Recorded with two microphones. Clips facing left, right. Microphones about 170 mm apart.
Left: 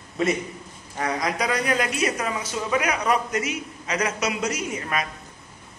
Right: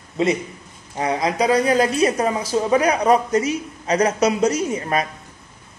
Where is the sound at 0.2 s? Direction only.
20° right (ahead or behind).